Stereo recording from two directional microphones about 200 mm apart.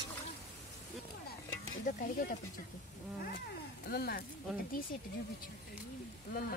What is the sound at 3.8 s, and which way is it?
Speech, 50° left (ahead or behind).